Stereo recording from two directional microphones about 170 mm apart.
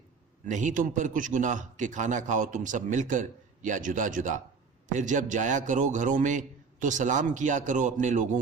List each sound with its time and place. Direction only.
0.4 s a man's voice: 45° right (ahead or behind)